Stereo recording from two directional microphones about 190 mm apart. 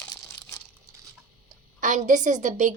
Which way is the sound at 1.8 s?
40° right (ahead or behind).